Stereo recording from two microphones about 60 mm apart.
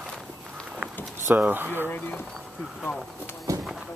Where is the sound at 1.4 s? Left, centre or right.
Right.